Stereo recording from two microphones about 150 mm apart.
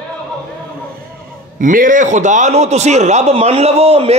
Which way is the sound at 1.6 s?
60° right (ahead or behind).